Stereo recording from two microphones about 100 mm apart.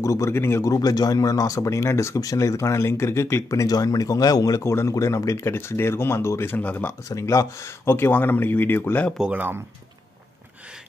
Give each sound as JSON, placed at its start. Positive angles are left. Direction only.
{"t": 0.0, "sound": "speech", "side_deg": 30}
{"t": 7.1, "sound": "speech", "side_deg": 30}
{"t": 9.3, "sound": "speech", "side_deg": -15}